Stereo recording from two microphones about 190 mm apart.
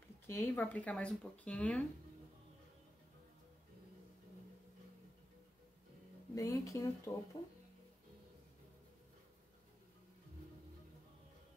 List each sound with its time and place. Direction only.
0.3 s speech: 10° left (ahead or behind)
6.3 s speech: 15° left (ahead or behind)